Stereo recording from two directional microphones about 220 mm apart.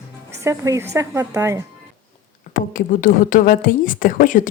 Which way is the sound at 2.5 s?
40° left (ahead or behind).